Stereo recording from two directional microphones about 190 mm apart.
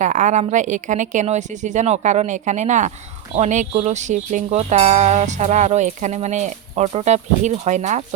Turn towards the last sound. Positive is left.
turn(degrees=-40)  # may be behind; listen again after turning